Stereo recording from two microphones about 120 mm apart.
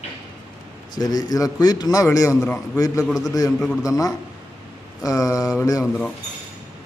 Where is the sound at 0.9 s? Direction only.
30° left (ahead or behind).